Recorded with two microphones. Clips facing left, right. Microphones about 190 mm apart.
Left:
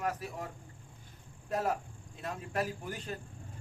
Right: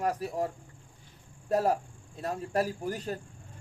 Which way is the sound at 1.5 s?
35° right (ahead or behind).